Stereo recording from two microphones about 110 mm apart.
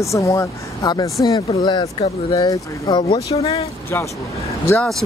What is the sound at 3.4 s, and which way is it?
Speech, 65° left (ahead or behind).